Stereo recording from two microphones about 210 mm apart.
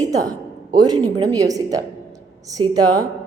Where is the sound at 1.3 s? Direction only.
15° right (ahead or behind).